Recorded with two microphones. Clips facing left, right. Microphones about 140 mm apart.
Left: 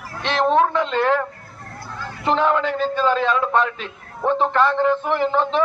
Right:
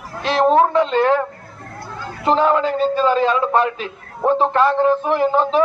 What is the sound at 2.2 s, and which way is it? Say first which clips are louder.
Speech: right 3 dB; 35° right (ahead or behind).